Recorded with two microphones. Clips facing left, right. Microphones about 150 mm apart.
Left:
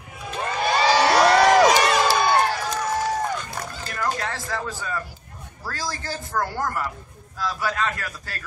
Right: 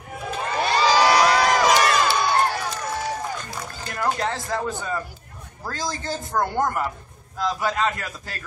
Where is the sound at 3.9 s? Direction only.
20° right (ahead or behind).